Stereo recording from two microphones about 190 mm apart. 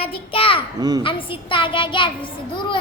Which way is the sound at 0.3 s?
30° left (ahead or behind).